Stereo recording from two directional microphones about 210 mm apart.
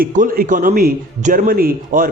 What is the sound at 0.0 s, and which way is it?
A man's voice, 40° right (ahead or behind).